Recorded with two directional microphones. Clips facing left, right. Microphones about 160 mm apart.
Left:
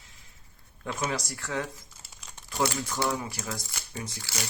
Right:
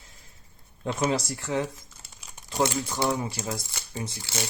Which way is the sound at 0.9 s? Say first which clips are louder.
Right 5 dB; 25° right (ahead or behind).